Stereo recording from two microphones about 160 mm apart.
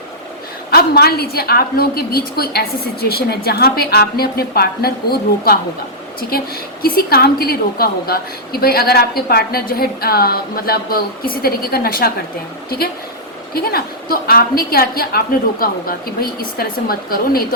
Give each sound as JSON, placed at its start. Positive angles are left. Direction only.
{"t": 0.7, "sound": "a woman's voice", "side_deg": 80}
{"t": 6.8, "sound": "a woman's voice", "side_deg": 70}
{"t": 13.5, "sound": "a woman's voice", "side_deg": 70}